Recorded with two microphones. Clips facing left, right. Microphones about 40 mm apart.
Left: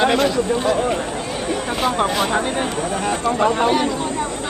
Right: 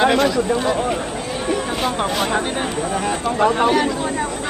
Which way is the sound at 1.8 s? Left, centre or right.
Centre.